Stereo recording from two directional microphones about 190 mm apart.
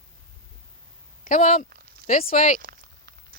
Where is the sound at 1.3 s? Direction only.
40° left (ahead or behind).